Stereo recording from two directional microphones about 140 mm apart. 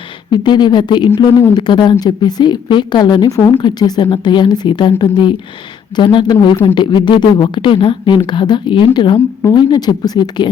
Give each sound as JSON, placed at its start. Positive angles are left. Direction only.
{"t": 0.3, "sound": "a woman's voice", "side_deg": 30}
{"t": 9.1, "sound": "a woman's voice", "side_deg": 15}
{"t": 9.6, "sound": "a woman's voice", "side_deg": 30}